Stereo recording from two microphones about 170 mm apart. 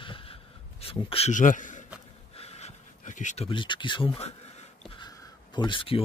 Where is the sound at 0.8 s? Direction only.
35° left (ahead or behind); by 1.8 s 50° left (ahead or behind).